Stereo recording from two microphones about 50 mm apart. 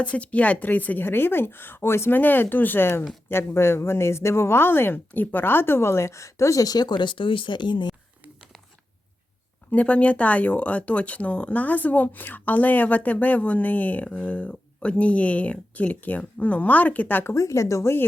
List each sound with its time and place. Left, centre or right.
0.0 s speech: left
1.0 s a woman's voice: left
2.1 s speech: left
9.7 s speech: left
17.3 s speech: left